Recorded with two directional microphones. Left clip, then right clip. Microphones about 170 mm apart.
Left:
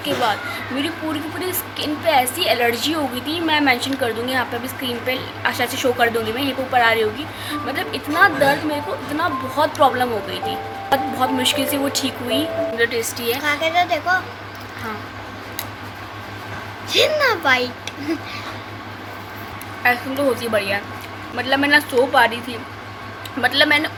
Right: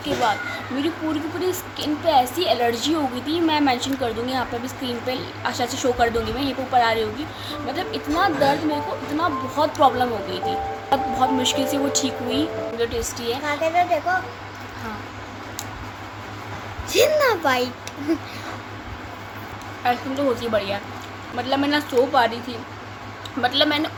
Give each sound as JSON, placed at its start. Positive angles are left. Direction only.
{"t": 0.0, "sound": "a woman's voice", "side_deg": 0}
{"t": 1.4, "sound": "a woman's voice", "side_deg": 0}
{"t": 13.4, "sound": "a child's voice", "side_deg": -20}
{"t": 16.9, "sound": "speech", "side_deg": -40}
{"t": 19.8, "sound": "a woman's voice", "side_deg": 10}